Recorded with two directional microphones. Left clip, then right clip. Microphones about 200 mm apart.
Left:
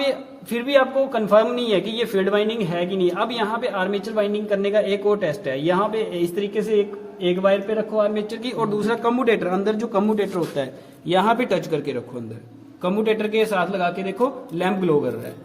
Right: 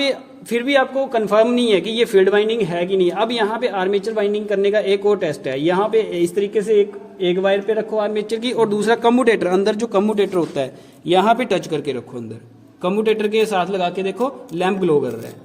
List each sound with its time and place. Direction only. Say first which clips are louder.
0.0 s a man's voice: right 2 dB; 45° right (ahead or behind); by 15.1 s 30° right (ahead or behind)